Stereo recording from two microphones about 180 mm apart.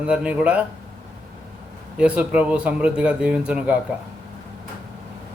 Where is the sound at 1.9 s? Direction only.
5° right (ahead or behind).